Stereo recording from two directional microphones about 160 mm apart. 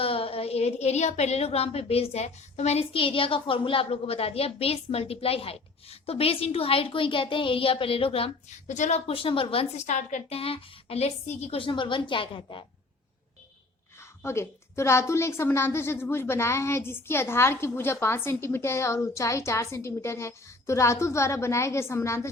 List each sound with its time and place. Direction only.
0.0 s a woman's voice: 35° left (ahead or behind)
8.6 s a woman's voice: 50° left (ahead or behind)
9.8 s a woman's voice: 50° left (ahead or behind); by 12.6 s 30° left (ahead or behind)
14.2 s a woman's voice: 15° left (ahead or behind)